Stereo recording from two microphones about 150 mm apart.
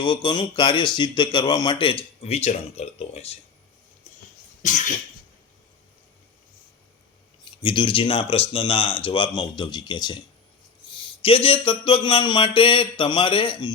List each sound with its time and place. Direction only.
0.0 s speech: 35° left (ahead or behind)
4.6 s cough: 55° left (ahead or behind)
7.4 s speech: 35° left (ahead or behind)